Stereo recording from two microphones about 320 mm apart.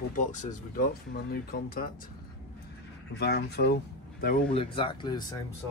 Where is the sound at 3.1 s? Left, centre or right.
Left.